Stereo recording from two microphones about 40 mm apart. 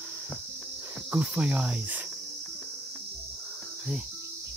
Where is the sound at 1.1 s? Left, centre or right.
Right.